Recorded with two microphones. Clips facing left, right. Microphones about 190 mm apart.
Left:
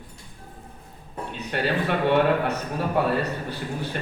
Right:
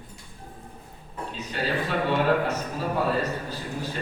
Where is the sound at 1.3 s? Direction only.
65° left (ahead or behind).